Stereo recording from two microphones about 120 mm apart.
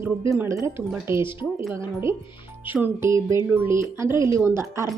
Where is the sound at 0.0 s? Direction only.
20° right (ahead or behind).